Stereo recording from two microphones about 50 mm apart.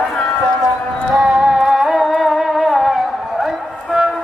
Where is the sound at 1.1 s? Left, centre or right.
Centre.